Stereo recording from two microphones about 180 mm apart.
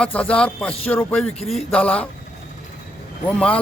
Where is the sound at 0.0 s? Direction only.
5° left (ahead or behind).